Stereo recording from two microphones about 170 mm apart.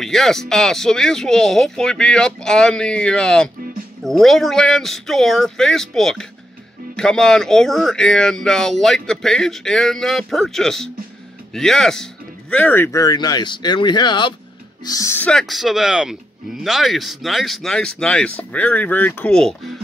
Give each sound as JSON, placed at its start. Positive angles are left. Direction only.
{"t": 0.0, "sound": "speech", "side_deg": 0}